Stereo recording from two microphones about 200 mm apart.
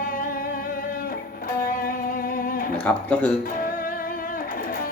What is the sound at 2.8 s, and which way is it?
Speech, 5° left (ahead or behind).